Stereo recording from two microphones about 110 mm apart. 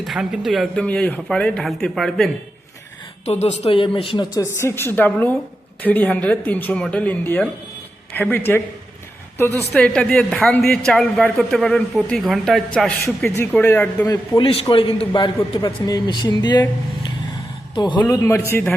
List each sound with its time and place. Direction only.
0.0 s speech: 5° right (ahead or behind)
0.9 s speech: 10° left (ahead or behind)
3.2 s speech: 70° left (ahead or behind); by 4.3 s 50° left (ahead or behind)
4.4 s a woman's voice: 25° left (ahead or behind)
9.7 s speech: 10° left (ahead or behind)
13.2 s a woman's voice: 20° left (ahead or behind)
14.4 s a man's voice: 55° left (ahead or behind)
18.1 s a woman's voice: 25° left (ahead or behind)